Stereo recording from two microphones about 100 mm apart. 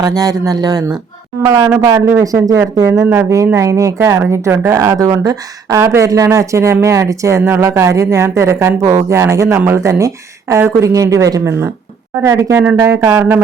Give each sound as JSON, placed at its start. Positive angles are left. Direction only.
{"t": 0.0, "sound": "speech", "side_deg": -40}